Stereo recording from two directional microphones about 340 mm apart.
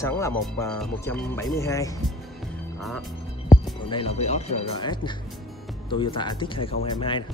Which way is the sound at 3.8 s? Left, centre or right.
Centre.